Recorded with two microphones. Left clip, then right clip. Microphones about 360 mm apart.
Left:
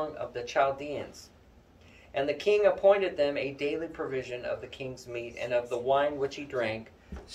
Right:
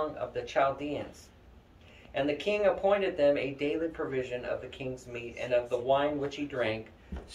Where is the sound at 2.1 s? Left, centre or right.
Centre.